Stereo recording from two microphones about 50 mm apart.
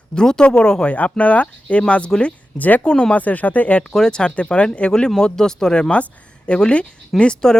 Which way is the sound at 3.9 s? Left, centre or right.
Centre.